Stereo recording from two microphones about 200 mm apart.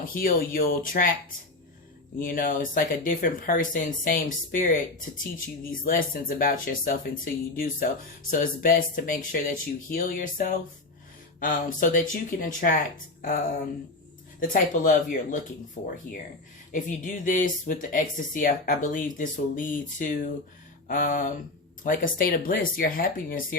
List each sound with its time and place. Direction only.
0.1 s speech: 45° left (ahead or behind)
2.1 s speech: 45° left (ahead or behind)
14.3 s speech: 40° left (ahead or behind)
16.7 s speech: 40° left (ahead or behind)